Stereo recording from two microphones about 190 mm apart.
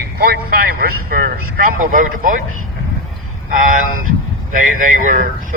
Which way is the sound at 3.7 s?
45° right (ahead or behind).